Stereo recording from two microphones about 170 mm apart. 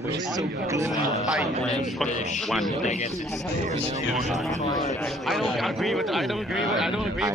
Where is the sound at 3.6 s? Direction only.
45° right (ahead or behind).